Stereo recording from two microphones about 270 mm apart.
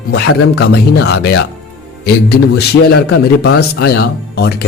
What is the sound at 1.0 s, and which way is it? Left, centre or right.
Speech, left.